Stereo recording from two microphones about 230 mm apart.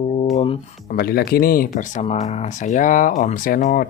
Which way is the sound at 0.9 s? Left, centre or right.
Left.